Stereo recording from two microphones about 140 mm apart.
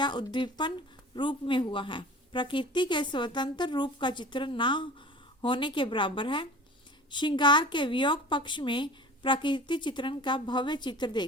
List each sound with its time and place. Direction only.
0.0 s a woman's voice: 35° left (ahead or behind)